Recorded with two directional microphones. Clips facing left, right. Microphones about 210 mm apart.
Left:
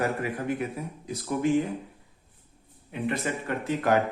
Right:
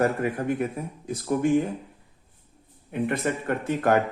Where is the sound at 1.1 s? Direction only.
50° right (ahead or behind).